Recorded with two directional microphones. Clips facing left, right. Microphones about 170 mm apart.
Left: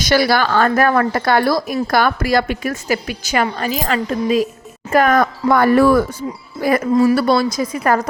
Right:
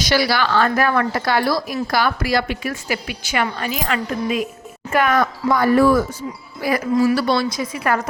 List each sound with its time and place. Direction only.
0.0 s speech: 50° left (ahead or behind); by 6.1 s 65° left (ahead or behind)
6.6 s speech: 50° left (ahead or behind)
6.9 s speech: 30° left (ahead or behind)
7.2 s speech: 50° left (ahead or behind)